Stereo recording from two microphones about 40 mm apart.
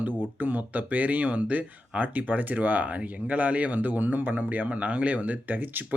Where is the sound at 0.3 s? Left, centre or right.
Right.